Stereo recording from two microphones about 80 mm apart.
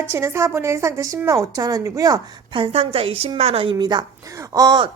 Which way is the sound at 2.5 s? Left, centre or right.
Right.